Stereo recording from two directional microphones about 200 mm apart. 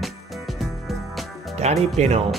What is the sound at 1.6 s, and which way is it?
Speech, 35° right (ahead or behind).